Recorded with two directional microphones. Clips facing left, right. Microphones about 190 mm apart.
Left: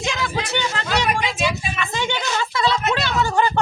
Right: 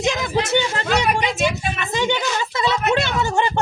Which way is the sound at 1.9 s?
15° right (ahead or behind).